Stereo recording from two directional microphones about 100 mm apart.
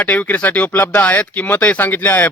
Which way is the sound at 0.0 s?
15° left (ahead or behind).